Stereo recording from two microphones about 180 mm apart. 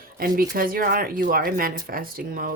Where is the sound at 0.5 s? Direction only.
55° right (ahead or behind).